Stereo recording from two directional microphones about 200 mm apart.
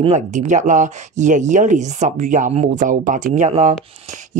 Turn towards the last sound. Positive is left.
turn(degrees=-40)  # may be behind; listen again after turning